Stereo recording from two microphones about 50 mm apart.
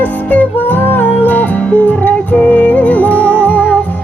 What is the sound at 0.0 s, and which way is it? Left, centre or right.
Music, left.